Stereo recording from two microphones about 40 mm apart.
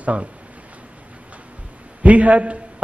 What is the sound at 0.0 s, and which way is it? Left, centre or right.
Speech, right.